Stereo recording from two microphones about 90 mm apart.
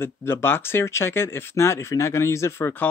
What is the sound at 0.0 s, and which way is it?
Speech, 25° left (ahead or behind).